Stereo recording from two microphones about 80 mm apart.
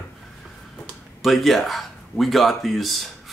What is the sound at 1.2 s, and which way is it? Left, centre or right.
Speech, centre.